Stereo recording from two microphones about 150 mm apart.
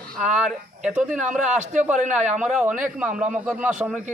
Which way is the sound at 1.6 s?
55° right (ahead or behind).